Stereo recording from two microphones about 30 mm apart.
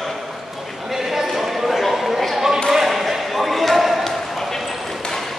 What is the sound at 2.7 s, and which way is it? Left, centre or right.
Basketball bounce, centre.